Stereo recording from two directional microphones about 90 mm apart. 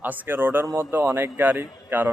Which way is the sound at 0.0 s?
20° right (ahead or behind).